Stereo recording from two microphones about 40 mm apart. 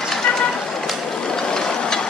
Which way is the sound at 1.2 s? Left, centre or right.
Centre.